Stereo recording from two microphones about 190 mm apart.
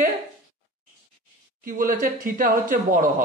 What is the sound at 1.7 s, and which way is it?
Speech, 45° right (ahead or behind).